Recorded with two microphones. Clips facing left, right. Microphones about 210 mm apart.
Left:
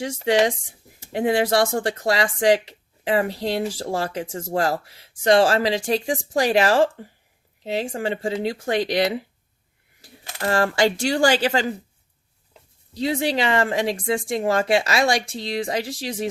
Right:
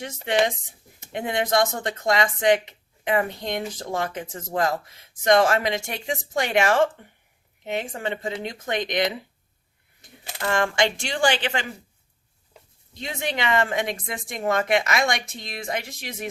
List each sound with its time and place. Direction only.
1.1 s speech: 30° left (ahead or behind)
10.4 s speech: 35° left (ahead or behind)
12.9 s speech: 35° left (ahead or behind)